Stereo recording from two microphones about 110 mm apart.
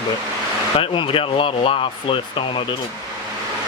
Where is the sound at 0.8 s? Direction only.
55° left (ahead or behind).